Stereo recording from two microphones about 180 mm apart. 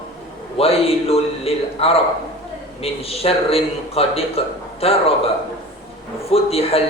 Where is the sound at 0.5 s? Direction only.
35° left (ahead or behind).